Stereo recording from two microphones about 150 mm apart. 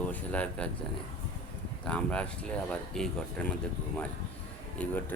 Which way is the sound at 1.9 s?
10° left (ahead or behind).